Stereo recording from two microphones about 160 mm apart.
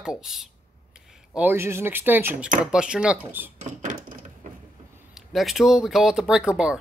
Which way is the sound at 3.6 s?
50° right (ahead or behind).